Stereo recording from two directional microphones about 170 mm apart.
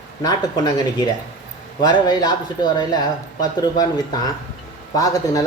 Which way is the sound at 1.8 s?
25° left (ahead or behind).